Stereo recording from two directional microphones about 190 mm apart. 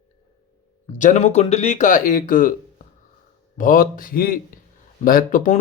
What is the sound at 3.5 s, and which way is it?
Speech, 45° left (ahead or behind).